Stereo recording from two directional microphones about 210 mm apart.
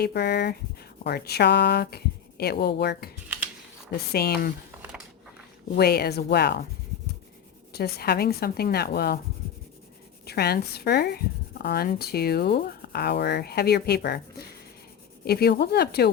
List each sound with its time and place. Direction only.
0.0 s speech: 50° left (ahead or behind)
4.1 s speech: 50° left (ahead or behind)
5.7 s speech: 50° left (ahead or behind)
7.7 s speech: 50° left (ahead or behind)
10.2 s speech: 50° left (ahead or behind)
15.2 s speech: 50° left (ahead or behind)